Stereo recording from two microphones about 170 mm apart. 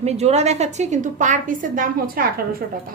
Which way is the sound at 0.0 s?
40° right (ahead or behind).